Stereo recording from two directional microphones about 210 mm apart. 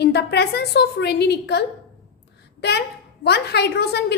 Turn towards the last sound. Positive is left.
turn(degrees=50)  # may be behind; listen again after turning